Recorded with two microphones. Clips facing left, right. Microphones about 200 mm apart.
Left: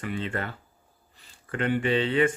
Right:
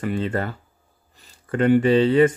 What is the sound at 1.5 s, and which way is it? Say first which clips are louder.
Speech: right 9 dB; 40° right (ahead or behind).